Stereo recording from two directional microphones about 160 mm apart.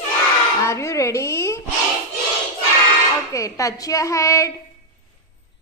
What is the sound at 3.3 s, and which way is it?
Speech, 20° left (ahead or behind).